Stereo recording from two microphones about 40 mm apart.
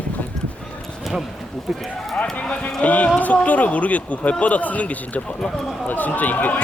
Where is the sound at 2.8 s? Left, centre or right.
Left.